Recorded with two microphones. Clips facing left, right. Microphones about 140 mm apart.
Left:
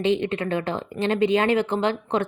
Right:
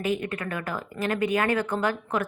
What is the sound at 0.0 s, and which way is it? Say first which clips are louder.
Speech: left 6 dB; 25° left (ahead or behind).